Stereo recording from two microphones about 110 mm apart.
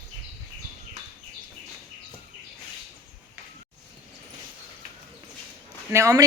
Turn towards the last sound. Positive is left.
turn(degrees=-30)  # may be behind; listen again after turning